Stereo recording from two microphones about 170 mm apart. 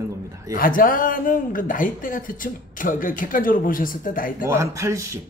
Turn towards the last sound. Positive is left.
turn(degrees=-15)  # may be behind; listen again after turning